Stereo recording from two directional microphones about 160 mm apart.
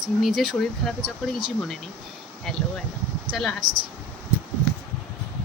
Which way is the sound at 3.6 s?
30° right (ahead or behind).